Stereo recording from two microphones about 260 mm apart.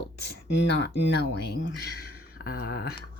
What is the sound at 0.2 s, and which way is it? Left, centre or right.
Speech, left.